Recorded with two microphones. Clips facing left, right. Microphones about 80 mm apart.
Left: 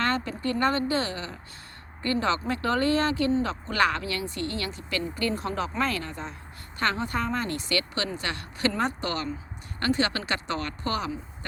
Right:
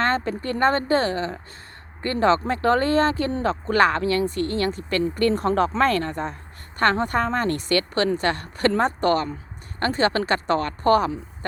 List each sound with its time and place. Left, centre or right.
0.0 s speech: right